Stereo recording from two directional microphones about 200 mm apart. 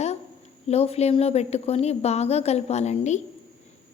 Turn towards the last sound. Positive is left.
turn(degrees=35)  # may be behind; listen again after turning